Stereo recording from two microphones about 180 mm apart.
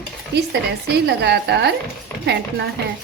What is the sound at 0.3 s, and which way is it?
A woman's voice, 70° right (ahead or behind).